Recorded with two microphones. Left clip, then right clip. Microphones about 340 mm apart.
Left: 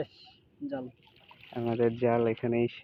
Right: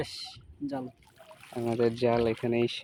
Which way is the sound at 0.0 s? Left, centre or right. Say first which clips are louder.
Right 3 dB; right.